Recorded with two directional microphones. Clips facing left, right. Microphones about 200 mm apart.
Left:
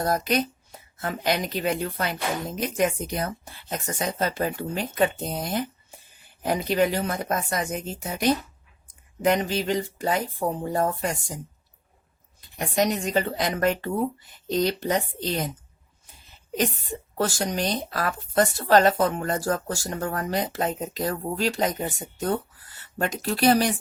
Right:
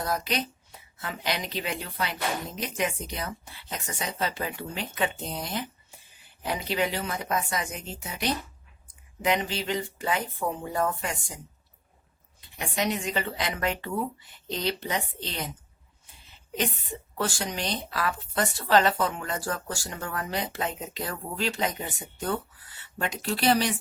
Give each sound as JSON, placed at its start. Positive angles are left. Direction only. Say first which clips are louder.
{"t": 0.0, "sound": "speech", "louder": "left 6 dB", "side_deg": 45}
{"t": 12.4, "sound": "speech", "louder": "left 6 dB", "side_deg": 40}
{"t": 16.6, "sound": "speech", "louder": "left 4 dB", "side_deg": 40}